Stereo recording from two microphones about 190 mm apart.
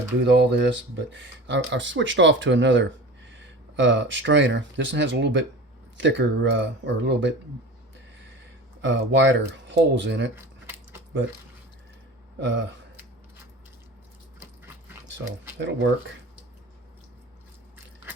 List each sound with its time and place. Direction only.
0.3 s speech: 65° right (ahead or behind)
8.8 s speech: 70° right (ahead or behind)
10.3 s a sound: 10° right (ahead or behind)
12.4 s speech: 70° right (ahead or behind)
15.5 s speech: 70° right (ahead or behind)